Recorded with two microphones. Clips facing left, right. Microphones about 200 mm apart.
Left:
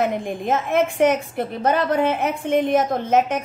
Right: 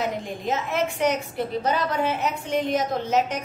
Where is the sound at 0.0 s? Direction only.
50° left (ahead or behind).